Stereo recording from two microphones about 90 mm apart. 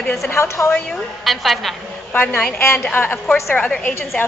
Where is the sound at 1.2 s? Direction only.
Centre (ahead or behind).